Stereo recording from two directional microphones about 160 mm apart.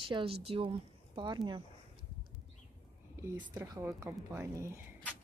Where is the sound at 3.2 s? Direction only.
20° right (ahead or behind).